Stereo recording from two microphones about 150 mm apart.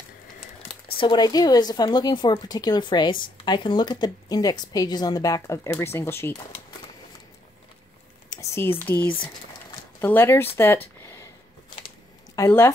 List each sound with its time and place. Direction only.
0.9 s a woman's voice: 30° left (ahead or behind)
8.3 s speech: 20° left (ahead or behind)
12.4 s speech: 15° left (ahead or behind)